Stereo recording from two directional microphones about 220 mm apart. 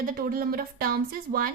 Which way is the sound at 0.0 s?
40° right (ahead or behind).